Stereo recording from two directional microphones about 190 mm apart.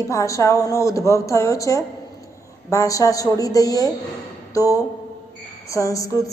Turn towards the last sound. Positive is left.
turn(degrees=15)  # may be behind; listen again after turning